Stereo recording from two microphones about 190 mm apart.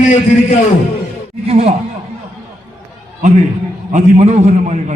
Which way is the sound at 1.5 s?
30° right (ahead or behind).